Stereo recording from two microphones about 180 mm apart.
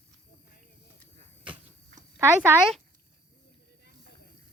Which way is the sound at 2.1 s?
10° right (ahead or behind).